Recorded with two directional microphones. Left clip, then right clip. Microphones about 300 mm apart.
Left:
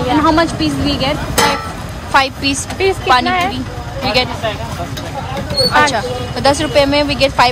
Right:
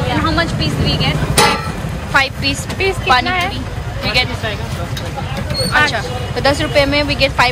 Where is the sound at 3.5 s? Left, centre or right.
Centre.